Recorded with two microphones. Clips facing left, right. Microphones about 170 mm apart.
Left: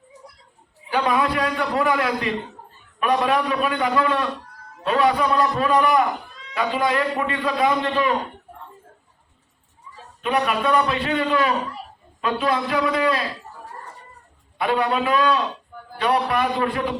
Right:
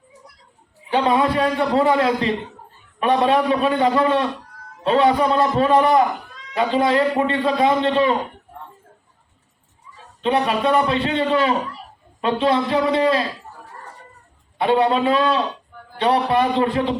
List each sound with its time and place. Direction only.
0.9 s a man's voice: 30° right (ahead or behind)
10.2 s a man's voice: 25° right (ahead or behind)
14.6 s a man's voice: 30° right (ahead or behind)